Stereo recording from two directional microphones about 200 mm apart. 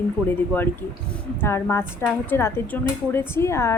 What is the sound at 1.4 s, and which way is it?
A woman's voice, 15° left (ahead or behind).